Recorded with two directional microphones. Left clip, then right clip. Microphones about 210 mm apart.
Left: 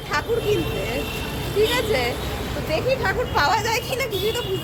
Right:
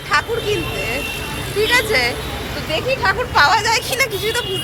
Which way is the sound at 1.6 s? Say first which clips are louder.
Right 6 dB; centre (ahead or behind).